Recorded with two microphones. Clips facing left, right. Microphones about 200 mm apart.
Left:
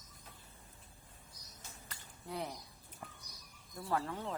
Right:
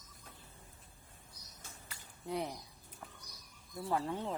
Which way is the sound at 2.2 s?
20° right (ahead or behind).